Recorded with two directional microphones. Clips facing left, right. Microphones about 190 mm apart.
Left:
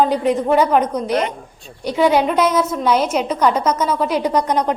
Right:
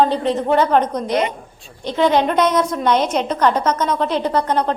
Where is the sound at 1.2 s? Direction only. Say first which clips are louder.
Right 1 dB; 10° right (ahead or behind).